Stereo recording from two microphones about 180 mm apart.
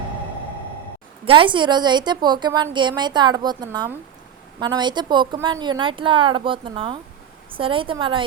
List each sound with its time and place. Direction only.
1.2 s speech: 30° right (ahead or behind)